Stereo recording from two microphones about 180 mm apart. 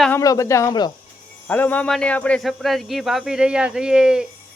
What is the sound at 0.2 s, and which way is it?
Speech, 20° left (ahead or behind).